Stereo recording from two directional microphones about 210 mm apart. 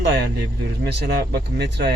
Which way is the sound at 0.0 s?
55° right (ahead or behind).